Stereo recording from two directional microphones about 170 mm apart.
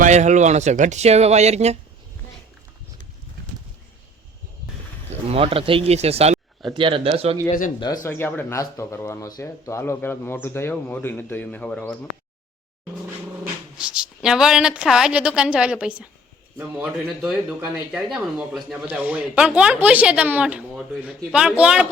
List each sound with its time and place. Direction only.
0.0 s speech: 45° right (ahead or behind)
5.3 s speech: 35° right (ahead or behind)
8.0 s speech: 15° left (ahead or behind)
13.4 s speech: 5° right (ahead or behind)